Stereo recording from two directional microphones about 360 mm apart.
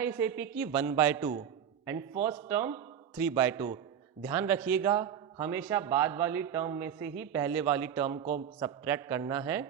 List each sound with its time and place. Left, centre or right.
0.0 s a woman's voice: centre